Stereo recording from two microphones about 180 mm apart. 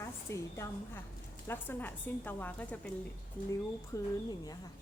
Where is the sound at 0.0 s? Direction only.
15° left (ahead or behind).